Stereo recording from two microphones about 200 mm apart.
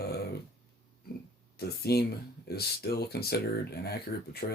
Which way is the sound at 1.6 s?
50° left (ahead or behind).